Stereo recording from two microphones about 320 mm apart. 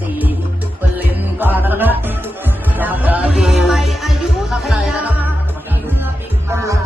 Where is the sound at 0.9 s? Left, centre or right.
Centre.